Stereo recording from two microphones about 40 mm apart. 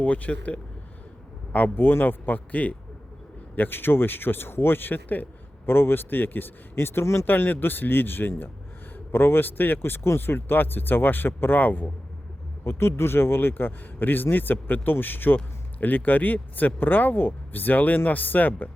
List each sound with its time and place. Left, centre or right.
0.0 s speech: left
1.7 s speech: left
3.5 s speech: left
5.6 s speech: left
7.3 s speech: left
12.6 s speech: left